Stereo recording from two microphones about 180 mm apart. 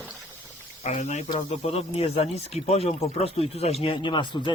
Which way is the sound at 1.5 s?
35° left (ahead or behind).